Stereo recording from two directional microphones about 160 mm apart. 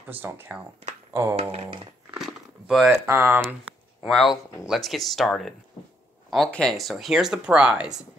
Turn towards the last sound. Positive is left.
turn(degrees=-5)  # may be behind; listen again after turning